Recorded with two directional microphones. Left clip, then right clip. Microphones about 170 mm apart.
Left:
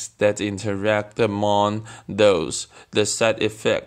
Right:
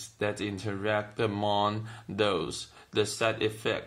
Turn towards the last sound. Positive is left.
turn(degrees=50)  # may be behind; listen again after turning